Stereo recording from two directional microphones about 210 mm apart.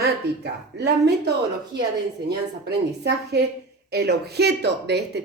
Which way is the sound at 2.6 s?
50° right (ahead or behind).